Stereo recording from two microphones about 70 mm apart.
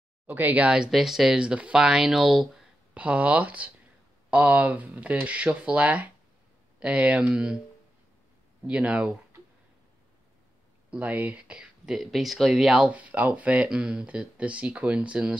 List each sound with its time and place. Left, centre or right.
0.3 s speech: right
0.8 s speech: centre
2.9 s speech: centre
8.6 s speech: centre
10.9 s speech: right
11.9 s speech: centre
12.8 s speech: centre